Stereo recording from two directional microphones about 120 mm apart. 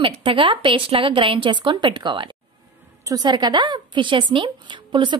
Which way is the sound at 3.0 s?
30° right (ahead or behind).